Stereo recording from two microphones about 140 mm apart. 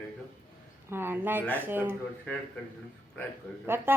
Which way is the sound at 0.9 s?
15° right (ahead or behind).